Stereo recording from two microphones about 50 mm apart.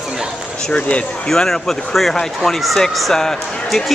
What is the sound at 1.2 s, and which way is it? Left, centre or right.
Speech, centre.